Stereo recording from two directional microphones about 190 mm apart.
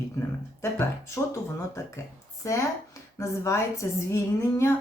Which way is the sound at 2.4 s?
15° left (ahead or behind).